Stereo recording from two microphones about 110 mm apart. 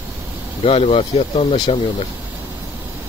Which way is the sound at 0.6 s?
60° left (ahead or behind).